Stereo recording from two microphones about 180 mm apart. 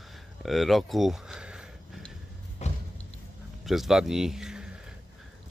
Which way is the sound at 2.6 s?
40° left (ahead or behind).